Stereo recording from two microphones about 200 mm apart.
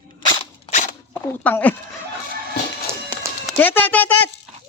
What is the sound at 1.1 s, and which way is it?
Speech, 10° left (ahead or behind).